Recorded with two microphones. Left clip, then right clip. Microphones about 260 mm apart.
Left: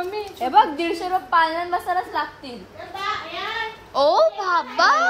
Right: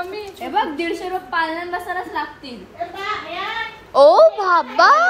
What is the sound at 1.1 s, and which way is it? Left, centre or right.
Speech, left.